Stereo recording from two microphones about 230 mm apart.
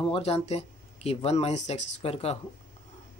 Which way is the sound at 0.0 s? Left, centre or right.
Left.